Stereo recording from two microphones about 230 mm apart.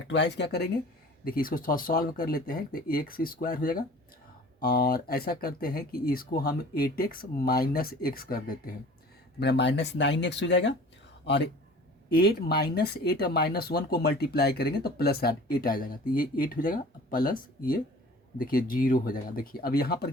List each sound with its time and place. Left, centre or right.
0.1 s speech: left
12.1 s speech: left